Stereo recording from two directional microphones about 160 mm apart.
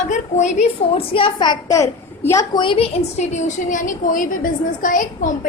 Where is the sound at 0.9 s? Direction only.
35° left (ahead or behind).